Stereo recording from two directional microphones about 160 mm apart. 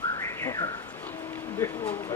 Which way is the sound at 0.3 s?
20° left (ahead or behind).